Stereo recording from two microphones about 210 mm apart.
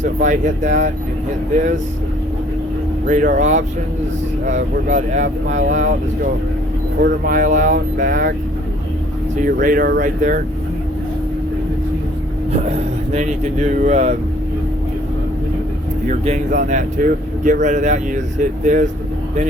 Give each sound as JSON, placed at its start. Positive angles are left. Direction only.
{"t": 0.0, "sound": "speech", "side_deg": -35}
{"t": 3.1, "sound": "speech", "side_deg": -35}
{"t": 7.0, "sound": "speech", "side_deg": -40}
{"t": 9.4, "sound": "speech", "side_deg": -40}
{"t": 12.6, "sound": "speech", "side_deg": -30}
{"t": 16.0, "sound": "speech", "side_deg": -35}